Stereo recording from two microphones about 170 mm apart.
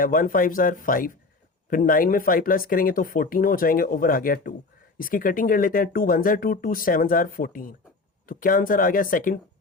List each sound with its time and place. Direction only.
0.0 s speech: 55° left (ahead or behind)